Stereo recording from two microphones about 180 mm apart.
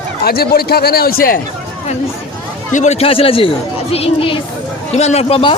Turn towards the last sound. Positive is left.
turn(degrees=30)  # may be behind; listen again after turning